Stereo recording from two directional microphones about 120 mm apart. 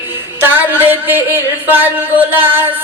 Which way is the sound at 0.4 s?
15° right (ahead or behind).